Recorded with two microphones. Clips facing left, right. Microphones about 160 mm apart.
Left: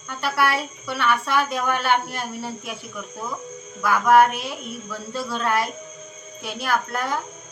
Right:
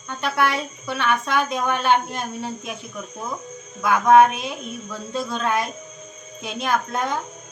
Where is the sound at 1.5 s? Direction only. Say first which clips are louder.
Right 2 dB; 20° right (ahead or behind).